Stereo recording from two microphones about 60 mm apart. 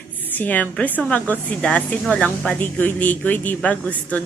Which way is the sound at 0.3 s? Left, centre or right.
Left.